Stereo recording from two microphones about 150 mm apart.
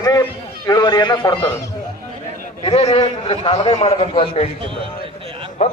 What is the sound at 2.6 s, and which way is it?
A man's voice, 40° left (ahead or behind).